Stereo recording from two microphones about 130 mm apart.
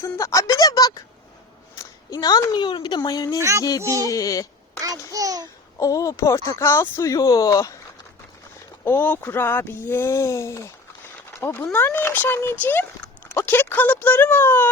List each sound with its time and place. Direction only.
0.0 s speech: 20° left (ahead or behind)
3.3 s music: 25° right (ahead or behind)
4.1 s speech: 25° left (ahead or behind)
4.8 s a child's voice: 25° right (ahead or behind)
5.8 s speech: 25° left (ahead or behind)
8.8 s speech: 15° left (ahead or behind)